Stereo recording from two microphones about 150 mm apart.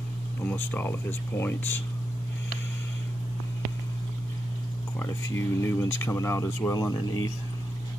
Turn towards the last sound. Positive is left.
turn(degrees=25)  # may be behind; listen again after turning